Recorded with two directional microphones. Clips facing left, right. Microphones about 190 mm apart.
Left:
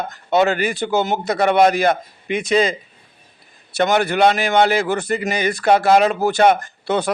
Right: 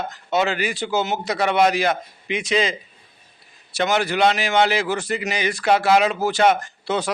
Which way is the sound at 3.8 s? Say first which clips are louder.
Left 4 dB; 55° left (ahead or behind).